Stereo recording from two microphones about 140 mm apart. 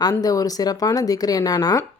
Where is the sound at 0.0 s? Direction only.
25° left (ahead or behind).